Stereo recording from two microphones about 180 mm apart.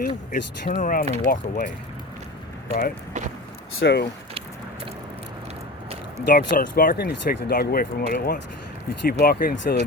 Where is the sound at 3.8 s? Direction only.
70° left (ahead or behind).